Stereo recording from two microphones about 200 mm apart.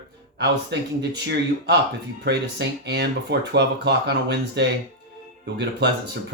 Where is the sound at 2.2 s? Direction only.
55° right (ahead or behind).